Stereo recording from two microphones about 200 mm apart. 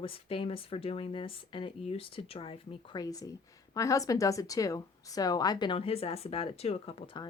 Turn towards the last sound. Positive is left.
turn(degrees=25)  # may be behind; listen again after turning